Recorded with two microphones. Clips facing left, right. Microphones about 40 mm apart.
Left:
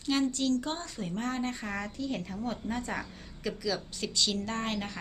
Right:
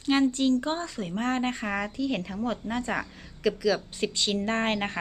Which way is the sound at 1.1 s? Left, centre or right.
Right.